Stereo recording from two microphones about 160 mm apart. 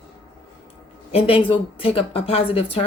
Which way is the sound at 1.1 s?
35° left (ahead or behind).